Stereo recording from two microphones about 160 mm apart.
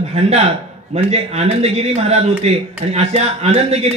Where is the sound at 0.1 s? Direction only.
40° right (ahead or behind).